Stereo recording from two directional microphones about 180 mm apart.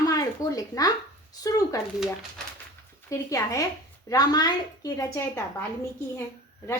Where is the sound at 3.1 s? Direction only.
15° left (ahead or behind).